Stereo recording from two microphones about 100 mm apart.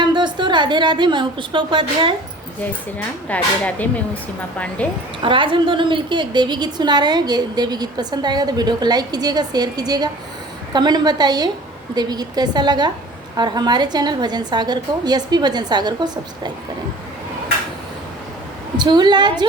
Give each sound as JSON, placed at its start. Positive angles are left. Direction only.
{"t": 0.0, "sound": "a woman's voice", "side_deg": -50}
{"t": 3.2, "sound": "speech", "side_deg": 15}
{"t": 5.2, "sound": "a woman's voice", "side_deg": -55}
{"t": 18.8, "sound": "a woman's voice", "side_deg": -50}